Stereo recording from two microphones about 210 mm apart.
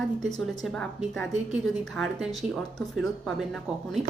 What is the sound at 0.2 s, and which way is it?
A woman's voice, centre (ahead or behind).